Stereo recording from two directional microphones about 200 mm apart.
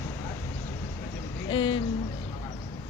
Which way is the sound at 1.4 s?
25° left (ahead or behind).